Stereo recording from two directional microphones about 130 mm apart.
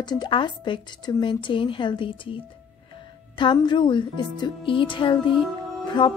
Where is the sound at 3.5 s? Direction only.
35° left (ahead or behind).